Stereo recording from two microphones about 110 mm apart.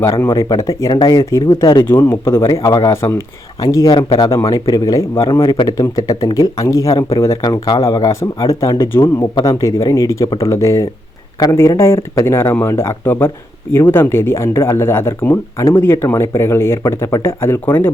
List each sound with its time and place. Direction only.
0.0 s speech: 25° left (ahead or behind)
5.3 s a man's voice: 40° left (ahead or behind); by 17.9 s 20° left (ahead or behind)